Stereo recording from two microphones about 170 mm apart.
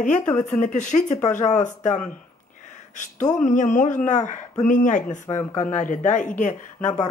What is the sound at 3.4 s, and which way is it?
Speech, 50° left (ahead or behind).